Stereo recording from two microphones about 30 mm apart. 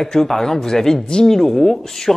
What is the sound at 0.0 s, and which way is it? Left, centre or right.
Speech, centre.